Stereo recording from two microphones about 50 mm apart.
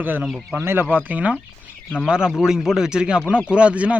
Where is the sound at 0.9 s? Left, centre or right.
Right.